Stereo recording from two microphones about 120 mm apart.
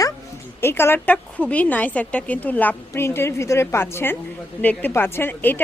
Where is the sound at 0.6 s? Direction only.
20° left (ahead or behind).